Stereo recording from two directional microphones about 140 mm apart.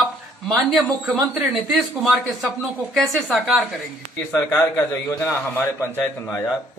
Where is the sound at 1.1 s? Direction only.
5° right (ahead or behind).